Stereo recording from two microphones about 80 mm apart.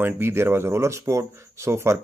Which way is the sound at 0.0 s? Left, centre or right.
Right.